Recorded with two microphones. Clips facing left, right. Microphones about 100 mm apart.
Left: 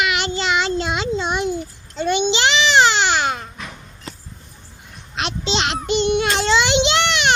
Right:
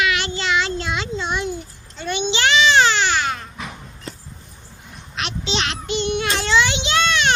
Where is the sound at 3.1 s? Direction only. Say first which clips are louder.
Left 2 dB; 20° left (ahead or behind).